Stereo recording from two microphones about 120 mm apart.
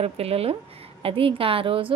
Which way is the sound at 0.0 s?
55° right (ahead or behind).